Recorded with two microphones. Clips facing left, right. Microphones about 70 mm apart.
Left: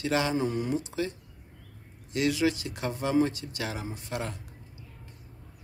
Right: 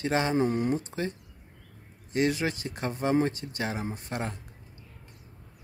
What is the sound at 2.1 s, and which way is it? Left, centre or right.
Speech, right.